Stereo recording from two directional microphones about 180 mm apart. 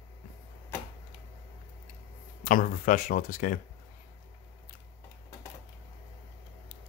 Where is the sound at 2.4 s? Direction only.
50° left (ahead or behind).